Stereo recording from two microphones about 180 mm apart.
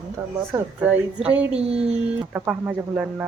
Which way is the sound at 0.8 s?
10° right (ahead or behind).